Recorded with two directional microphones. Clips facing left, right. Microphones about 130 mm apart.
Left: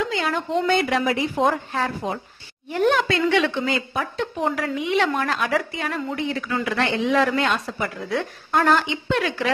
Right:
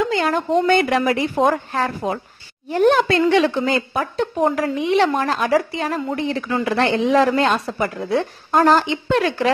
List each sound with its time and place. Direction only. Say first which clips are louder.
0.1 s a woman's voice: right 5 dB; 50° right (ahead or behind)